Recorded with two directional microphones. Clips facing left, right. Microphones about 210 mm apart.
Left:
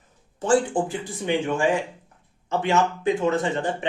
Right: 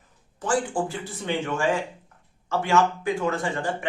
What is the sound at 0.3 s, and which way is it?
Speech, 25° left (ahead or behind).